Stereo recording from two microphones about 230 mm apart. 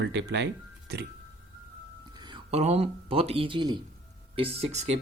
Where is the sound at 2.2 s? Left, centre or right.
Right.